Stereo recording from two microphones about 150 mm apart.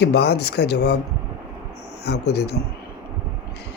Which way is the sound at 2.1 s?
90° left.